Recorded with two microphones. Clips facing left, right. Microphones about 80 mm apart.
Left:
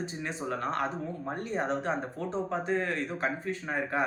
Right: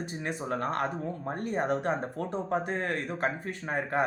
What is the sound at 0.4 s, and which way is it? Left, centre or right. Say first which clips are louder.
A man's voice: even; right.